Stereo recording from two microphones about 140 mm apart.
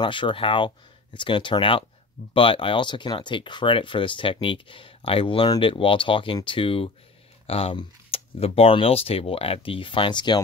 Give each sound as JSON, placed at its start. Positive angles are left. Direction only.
{"t": 0.0, "sound": "speech", "side_deg": 35}